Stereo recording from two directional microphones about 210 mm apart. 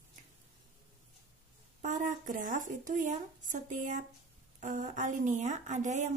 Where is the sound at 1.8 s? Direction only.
35° right (ahead or behind).